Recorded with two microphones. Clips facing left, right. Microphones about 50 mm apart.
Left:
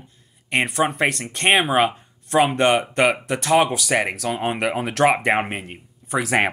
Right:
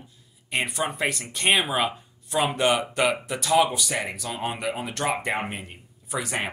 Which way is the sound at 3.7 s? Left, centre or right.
Left.